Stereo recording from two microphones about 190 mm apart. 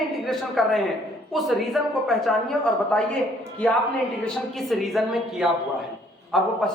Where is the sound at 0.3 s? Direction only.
Centre (ahead or behind).